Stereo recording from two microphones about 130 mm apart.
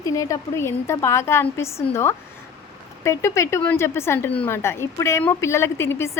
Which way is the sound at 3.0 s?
20° left (ahead or behind).